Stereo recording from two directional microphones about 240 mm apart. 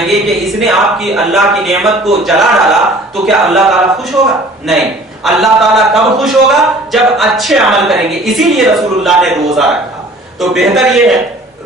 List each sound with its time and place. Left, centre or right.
0.0 s speech: centre
5.2 s speech: centre